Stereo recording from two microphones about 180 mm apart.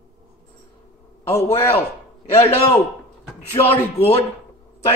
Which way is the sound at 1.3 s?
35° left (ahead or behind).